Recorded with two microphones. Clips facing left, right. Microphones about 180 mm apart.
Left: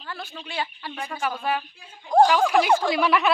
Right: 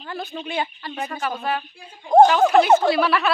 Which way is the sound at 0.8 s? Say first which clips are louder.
Right 4 dB; 10° left (ahead or behind).